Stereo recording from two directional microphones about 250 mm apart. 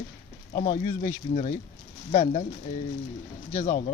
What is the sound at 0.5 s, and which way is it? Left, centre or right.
Speech, left.